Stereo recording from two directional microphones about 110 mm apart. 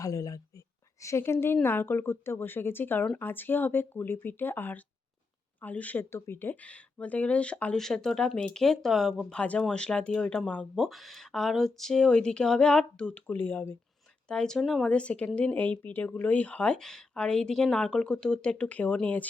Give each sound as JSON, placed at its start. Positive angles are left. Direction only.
{"t": 0.0, "sound": "speech", "side_deg": 30}
{"t": 10.8, "sound": "speech", "side_deg": 0}
{"t": 14.3, "sound": "speech", "side_deg": 5}